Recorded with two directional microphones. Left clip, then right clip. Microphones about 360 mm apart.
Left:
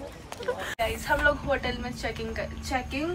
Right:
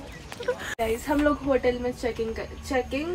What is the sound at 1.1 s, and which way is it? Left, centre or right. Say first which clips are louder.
Speech: even; centre.